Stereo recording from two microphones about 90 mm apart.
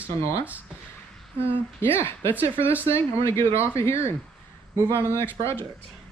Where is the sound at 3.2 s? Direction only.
30° left (ahead or behind).